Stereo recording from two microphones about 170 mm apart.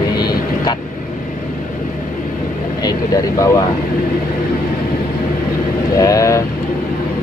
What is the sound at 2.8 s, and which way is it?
Speech, 20° left (ahead or behind).